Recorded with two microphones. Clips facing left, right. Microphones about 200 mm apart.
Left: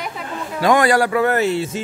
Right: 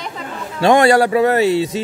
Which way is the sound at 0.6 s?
25° right (ahead or behind).